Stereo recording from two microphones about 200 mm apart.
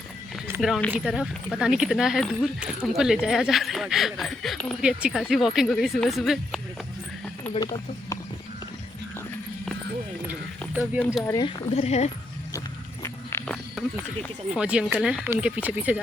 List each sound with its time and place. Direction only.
0.3 s a sound: 10° right (ahead or behind)
0.6 s speech: 5° left (ahead or behind)
7.5 s speech: 20° left (ahead or behind)
11.3 s speech: 20° left (ahead or behind)
12.5 s walk: 15° left (ahead or behind)
14.5 s speech: 5° right (ahead or behind)